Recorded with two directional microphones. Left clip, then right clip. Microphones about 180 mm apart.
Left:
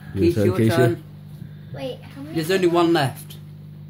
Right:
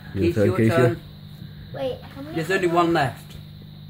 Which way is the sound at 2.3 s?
55° left (ahead or behind).